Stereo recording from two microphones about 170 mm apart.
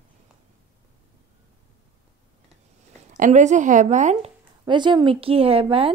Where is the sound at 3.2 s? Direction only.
45° right (ahead or behind).